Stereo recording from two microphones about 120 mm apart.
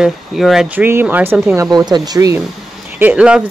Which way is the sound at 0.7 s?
15° right (ahead or behind).